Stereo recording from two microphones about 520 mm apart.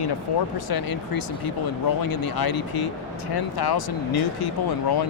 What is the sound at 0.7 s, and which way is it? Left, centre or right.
Speech, left.